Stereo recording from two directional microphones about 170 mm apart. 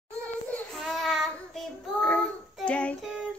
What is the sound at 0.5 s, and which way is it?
Child singing, 5° left (ahead or behind).